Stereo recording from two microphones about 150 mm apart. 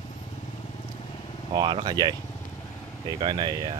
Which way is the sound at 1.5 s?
30° right (ahead or behind).